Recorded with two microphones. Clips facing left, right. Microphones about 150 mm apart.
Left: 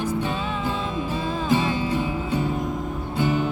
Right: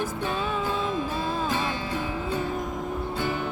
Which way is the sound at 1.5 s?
15° left (ahead or behind).